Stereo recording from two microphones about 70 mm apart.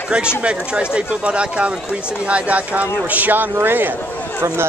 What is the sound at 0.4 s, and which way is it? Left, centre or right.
Speech, centre.